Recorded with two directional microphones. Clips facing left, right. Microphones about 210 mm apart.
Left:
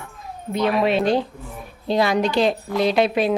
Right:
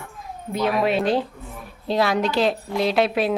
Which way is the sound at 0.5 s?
5° right (ahead or behind).